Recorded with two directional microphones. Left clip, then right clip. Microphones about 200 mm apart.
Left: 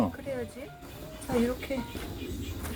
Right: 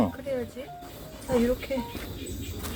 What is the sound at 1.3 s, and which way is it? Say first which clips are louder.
Speech: right 4 dB; centre (ahead or behind).